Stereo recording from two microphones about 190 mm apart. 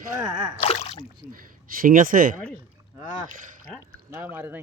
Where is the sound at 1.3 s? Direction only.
45° right (ahead or behind).